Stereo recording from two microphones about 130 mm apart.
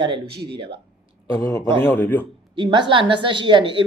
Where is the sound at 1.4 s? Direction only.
25° left (ahead or behind).